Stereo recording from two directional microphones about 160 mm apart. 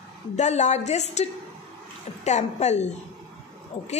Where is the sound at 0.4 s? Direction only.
45° left (ahead or behind).